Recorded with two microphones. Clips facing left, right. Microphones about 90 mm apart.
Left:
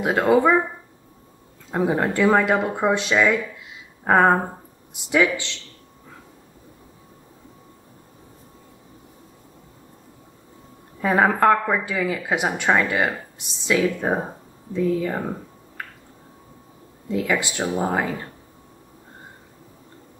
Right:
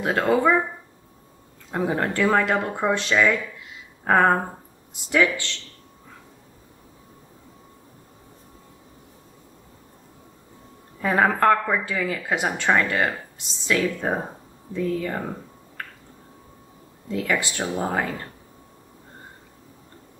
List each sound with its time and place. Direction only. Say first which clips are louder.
0.0 s speech: left 3 dB; 10° left (ahead or behind)
1.7 s speech: left 3 dB; 10° left (ahead or behind)
11.0 s speech: left 2 dB; 10° left (ahead or behind)
15.8 s a sound: left 1 dB; 15° left (ahead or behind)
17.1 s speech: left 2 dB; 10° left (ahead or behind)